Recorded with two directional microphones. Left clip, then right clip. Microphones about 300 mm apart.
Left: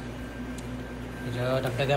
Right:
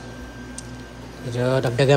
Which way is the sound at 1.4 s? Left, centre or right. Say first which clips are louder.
Right 7 dB; right.